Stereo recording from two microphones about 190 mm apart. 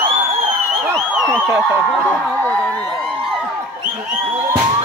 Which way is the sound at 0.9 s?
Centre (ahead or behind).